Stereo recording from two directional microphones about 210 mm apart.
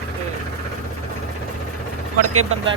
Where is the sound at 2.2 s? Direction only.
90° right.